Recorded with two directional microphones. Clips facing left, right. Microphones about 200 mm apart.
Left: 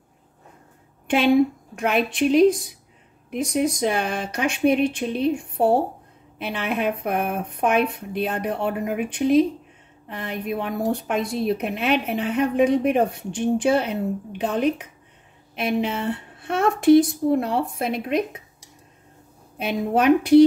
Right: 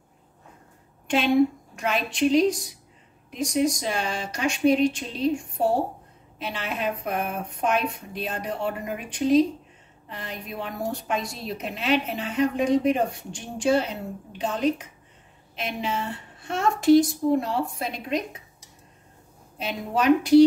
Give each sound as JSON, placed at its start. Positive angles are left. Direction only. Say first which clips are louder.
{"t": 1.0, "sound": "a sound", "louder": "left 4 dB", "side_deg": 55}
{"t": 1.8, "sound": "speech", "louder": "left 3 dB", "side_deg": 55}
{"t": 6.3, "sound": "speech", "louder": "left 5 dB", "side_deg": 55}
{"t": 19.6, "sound": "speech", "louder": "left 5 dB", "side_deg": 55}